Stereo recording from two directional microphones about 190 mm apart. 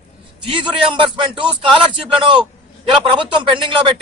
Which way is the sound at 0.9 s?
25° right (ahead or behind).